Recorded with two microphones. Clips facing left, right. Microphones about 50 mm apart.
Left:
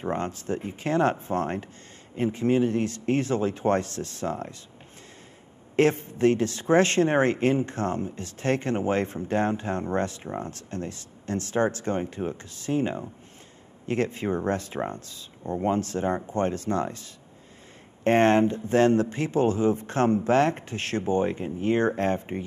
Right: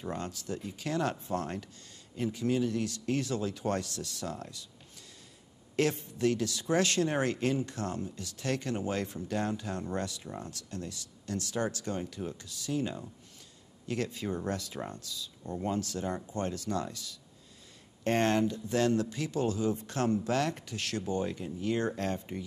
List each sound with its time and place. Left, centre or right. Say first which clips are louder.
0.0 s speech: left 8 dB; left
5.8 s speech: left 8 dB; left